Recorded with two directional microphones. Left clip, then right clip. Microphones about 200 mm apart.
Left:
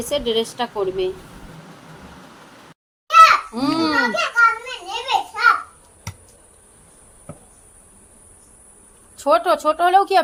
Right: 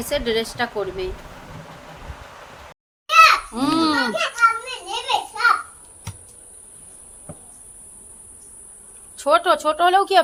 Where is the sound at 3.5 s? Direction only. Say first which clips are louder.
Even; centre (ahead or behind).